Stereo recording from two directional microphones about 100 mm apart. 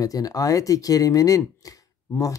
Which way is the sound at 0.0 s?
35° left (ahead or behind).